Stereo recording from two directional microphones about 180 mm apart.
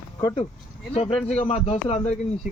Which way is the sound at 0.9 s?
35° left (ahead or behind).